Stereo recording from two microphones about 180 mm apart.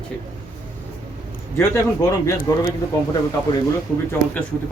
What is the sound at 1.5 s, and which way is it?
Speech, 15° left (ahead or behind).